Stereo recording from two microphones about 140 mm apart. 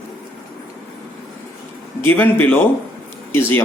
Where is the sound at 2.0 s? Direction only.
15° left (ahead or behind).